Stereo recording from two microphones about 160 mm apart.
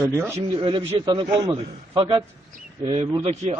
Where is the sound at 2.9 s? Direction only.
40° right (ahead or behind).